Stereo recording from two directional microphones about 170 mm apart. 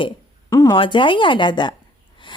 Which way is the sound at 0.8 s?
30° left (ahead or behind).